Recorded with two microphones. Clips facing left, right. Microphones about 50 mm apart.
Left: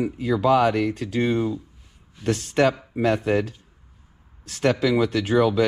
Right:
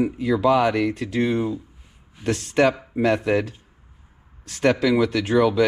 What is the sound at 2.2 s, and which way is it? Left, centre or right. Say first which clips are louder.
Speech: right 1 dB; right.